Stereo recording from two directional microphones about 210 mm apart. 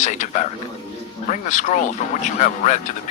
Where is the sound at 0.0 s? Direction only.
35° left (ahead or behind).